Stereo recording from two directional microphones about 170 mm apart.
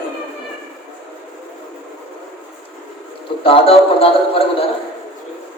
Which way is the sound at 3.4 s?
35° left (ahead or behind).